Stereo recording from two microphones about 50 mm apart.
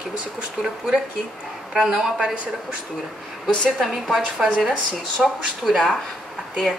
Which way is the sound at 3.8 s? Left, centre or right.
Centre.